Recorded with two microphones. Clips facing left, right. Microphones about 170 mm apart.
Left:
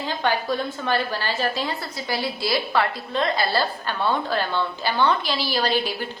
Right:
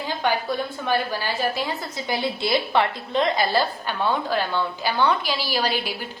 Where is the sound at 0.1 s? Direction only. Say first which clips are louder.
Even; 10° right (ahead or behind).